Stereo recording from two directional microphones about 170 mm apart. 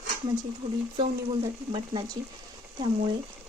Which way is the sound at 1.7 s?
25° right (ahead or behind).